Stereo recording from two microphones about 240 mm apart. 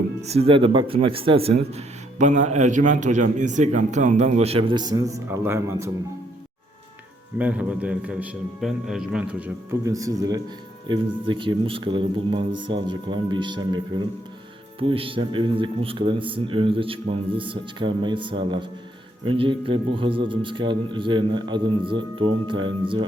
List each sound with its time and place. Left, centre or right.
0.2 s a man's voice: right
7.3 s a man's voice: centre
9.8 s a man's voice: centre
14.8 s a man's voice: right